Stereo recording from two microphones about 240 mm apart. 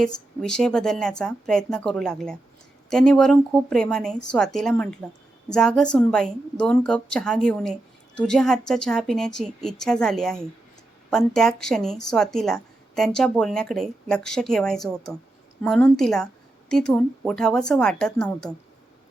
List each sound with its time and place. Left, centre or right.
0.0 s a woman's voice: centre